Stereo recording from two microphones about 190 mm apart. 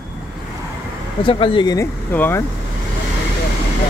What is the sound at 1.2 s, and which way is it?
Speech, 25° left (ahead or behind).